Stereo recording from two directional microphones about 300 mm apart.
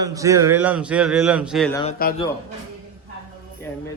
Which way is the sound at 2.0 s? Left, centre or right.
Left.